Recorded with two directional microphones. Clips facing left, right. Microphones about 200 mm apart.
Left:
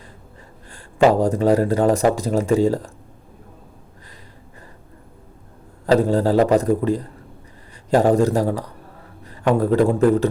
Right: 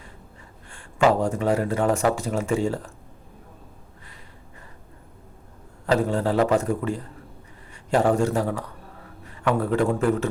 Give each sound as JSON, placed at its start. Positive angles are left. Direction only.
{"t": 0.7, "sound": "speech", "side_deg": 35}
{"t": 5.8, "sound": "a man's voice", "side_deg": 35}